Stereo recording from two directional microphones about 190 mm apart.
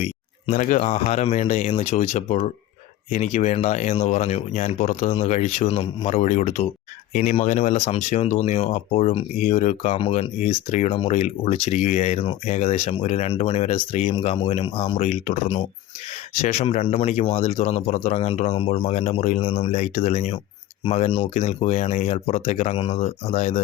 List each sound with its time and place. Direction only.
0.0 s speech: 35° left (ahead or behind)